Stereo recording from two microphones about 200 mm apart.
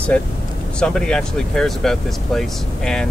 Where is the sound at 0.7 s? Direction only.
5° left (ahead or behind).